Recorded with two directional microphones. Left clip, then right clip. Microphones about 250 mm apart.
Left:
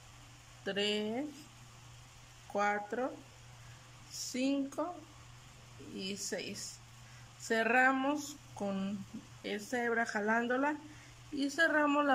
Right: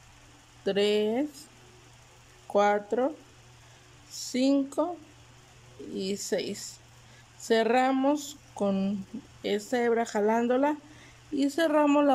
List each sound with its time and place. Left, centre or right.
0.7 s speech: centre
2.5 s speech: centre
4.1 s speech: centre
5.9 s speech: centre